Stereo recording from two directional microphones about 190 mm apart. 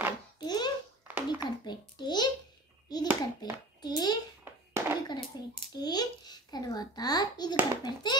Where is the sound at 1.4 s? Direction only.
20° left (ahead or behind).